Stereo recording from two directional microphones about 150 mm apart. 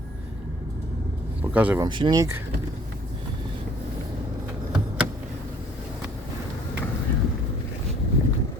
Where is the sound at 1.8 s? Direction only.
30° right (ahead or behind).